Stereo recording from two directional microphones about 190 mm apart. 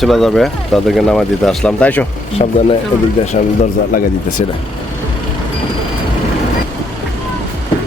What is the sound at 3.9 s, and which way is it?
Speech, 45° left (ahead or behind).